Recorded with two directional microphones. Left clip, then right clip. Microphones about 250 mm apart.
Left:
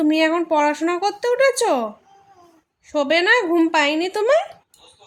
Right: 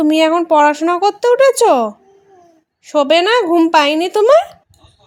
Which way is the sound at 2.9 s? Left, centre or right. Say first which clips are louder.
Right 5 dB; right.